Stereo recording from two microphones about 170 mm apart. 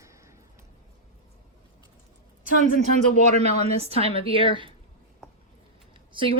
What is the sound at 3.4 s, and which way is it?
A woman's voice, 40° right (ahead or behind).